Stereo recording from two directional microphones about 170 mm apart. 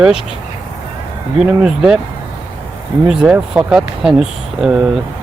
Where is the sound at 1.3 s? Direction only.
5° right (ahead or behind).